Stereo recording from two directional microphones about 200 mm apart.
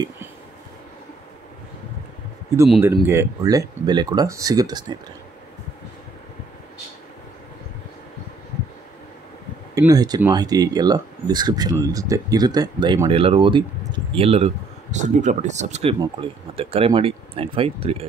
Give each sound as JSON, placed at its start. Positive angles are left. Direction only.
{"t": 3.1, "sound": "speech", "side_deg": -15}
{"t": 9.8, "sound": "speech", "side_deg": -20}